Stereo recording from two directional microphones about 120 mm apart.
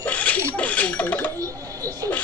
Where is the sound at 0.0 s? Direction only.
10° left (ahead or behind).